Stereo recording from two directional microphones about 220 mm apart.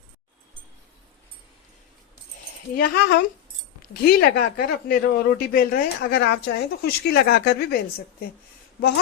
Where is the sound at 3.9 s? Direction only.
45° left (ahead or behind).